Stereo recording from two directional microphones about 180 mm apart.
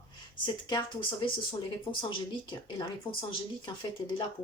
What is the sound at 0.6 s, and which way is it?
Speech, 25° left (ahead or behind).